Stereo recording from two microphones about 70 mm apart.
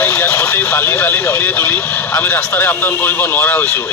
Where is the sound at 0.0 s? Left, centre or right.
Left.